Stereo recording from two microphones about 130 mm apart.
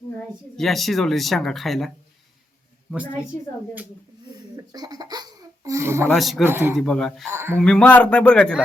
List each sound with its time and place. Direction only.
0.5 s speech: centre (ahead or behind)
4.5 s baby laughter: 30° right (ahead or behind)
6.1 s speech: centre (ahead or behind)
6.4 s speech: 20° right (ahead or behind)
6.7 s speech: 5° left (ahead or behind)
7.3 s speech: 20° right (ahead or behind)
7.6 s a man's voice: 5° left (ahead or behind)